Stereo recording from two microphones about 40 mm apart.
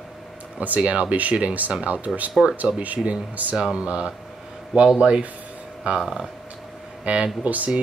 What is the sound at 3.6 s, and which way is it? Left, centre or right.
Speech, right.